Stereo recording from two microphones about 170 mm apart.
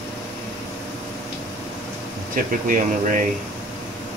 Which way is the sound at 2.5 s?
50° right (ahead or behind).